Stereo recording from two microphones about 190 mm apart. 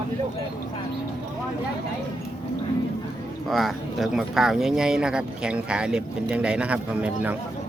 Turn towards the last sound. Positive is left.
turn(degrees=-5)  # may be behind; listen again after turning